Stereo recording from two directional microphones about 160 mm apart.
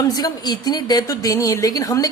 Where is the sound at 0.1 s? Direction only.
25° left (ahead or behind).